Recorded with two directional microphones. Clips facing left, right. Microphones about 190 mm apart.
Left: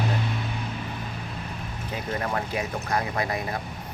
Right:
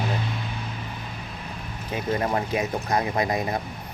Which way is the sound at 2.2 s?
20° right (ahead or behind).